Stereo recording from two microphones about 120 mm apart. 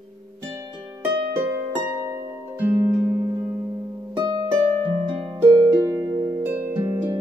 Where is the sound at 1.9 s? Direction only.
25° right (ahead or behind).